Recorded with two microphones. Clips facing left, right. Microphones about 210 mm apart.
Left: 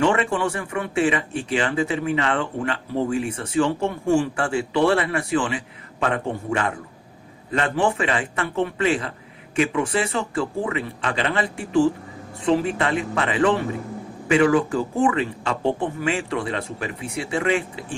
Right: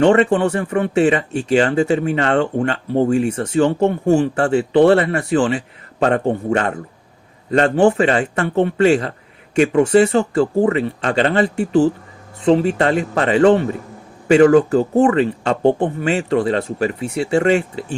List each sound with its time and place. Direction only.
0.0 s speech: 35° right (ahead or behind)